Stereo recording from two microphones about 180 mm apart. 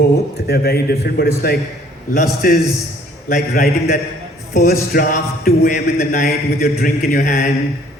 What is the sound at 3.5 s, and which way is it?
A man's voice, 55° left (ahead or behind).